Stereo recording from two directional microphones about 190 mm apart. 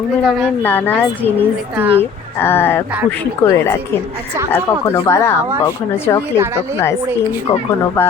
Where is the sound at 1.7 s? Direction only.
10° right (ahead or behind).